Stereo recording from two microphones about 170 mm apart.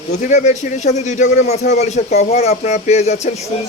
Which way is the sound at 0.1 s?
45° left (ahead or behind).